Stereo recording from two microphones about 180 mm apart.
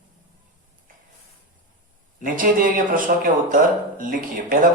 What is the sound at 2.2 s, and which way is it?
Speech, 50° right (ahead or behind).